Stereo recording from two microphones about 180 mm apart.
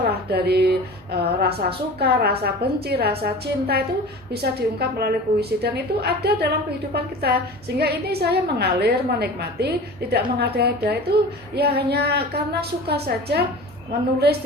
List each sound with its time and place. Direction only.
0.1 s a woman's voice: 60° right (ahead or behind)